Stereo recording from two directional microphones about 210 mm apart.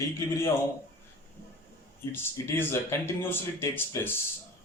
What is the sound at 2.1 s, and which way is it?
Speech, 15° left (ahead or behind).